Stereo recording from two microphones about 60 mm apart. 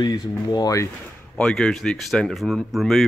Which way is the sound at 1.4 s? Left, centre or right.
Centre.